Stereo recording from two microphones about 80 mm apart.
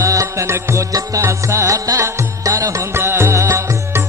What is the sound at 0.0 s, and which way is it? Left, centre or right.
Music, right.